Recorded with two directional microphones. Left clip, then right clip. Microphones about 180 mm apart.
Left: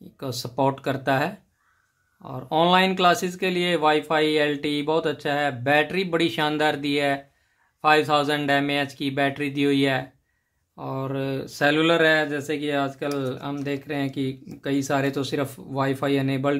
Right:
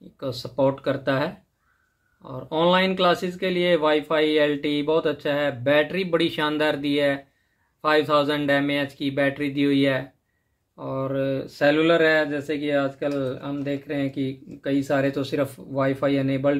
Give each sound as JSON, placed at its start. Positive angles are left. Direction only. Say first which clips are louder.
{"t": 0.2, "sound": "speech", "louder": "right 1 dB", "side_deg": 25}